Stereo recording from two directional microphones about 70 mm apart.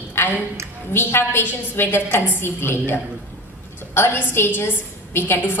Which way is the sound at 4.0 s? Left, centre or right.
Left.